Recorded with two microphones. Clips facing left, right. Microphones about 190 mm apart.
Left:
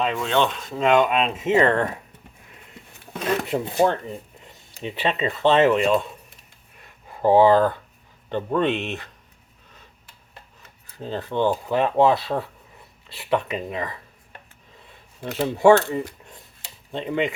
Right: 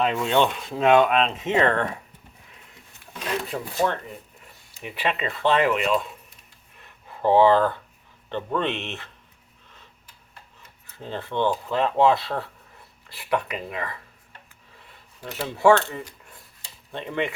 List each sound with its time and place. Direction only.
0.2 s speech: 15° right (ahead or behind); by 1.5 s 5° left (ahead or behind)
3.5 s speech: 25° left (ahead or behind)
6.8 s a sound: 15° left (ahead or behind)
8.3 s speech: 15° left (ahead or behind)
11.0 s speech: 15° left (ahead or behind)
15.2 s speech: 20° left (ahead or behind)